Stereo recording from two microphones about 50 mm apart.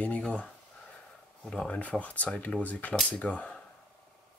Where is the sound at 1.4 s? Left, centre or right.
Centre.